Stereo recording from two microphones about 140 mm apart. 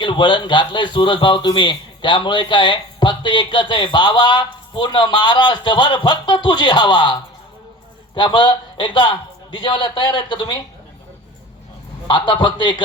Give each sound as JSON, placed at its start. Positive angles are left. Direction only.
{"t": 0.0, "sound": "a man's voice", "side_deg": 35}
{"t": 12.0, "sound": "a man's voice", "side_deg": 35}